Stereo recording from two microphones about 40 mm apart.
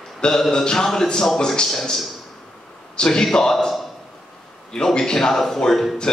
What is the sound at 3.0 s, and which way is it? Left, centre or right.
Speech, centre.